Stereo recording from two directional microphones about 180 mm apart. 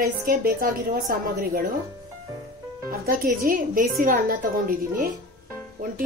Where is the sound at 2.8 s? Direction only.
50° right (ahead or behind).